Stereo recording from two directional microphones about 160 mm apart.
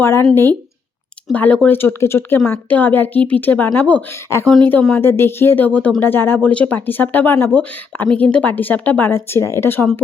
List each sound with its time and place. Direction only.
0.0 s speech: 15° left (ahead or behind)
1.3 s speech: 10° left (ahead or behind)